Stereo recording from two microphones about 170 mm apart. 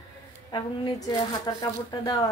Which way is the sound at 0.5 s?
25° left (ahead or behind).